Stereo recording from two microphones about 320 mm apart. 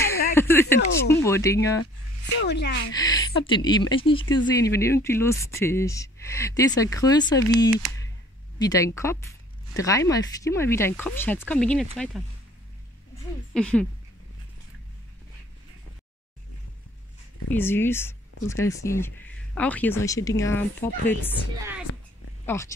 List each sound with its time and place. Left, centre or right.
0.3 s a sound: centre
1.2 s speech: centre
2.3 s speech: left
2.9 s speech: centre
13.5 s speech: centre
17.5 s speech: centre
22.5 s speech: centre